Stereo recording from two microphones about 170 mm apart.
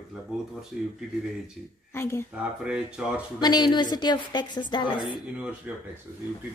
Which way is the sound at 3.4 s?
25° left (ahead or behind).